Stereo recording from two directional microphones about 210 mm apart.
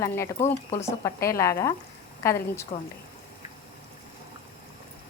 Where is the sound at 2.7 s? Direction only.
30° left (ahead or behind).